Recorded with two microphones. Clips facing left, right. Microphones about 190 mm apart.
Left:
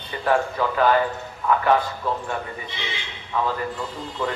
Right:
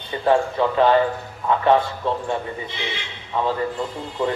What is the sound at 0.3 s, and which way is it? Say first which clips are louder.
A man's voice: right 3 dB; 25° right (ahead or behind).